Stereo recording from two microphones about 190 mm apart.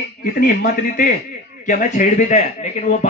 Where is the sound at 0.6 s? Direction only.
45° left (ahead or behind).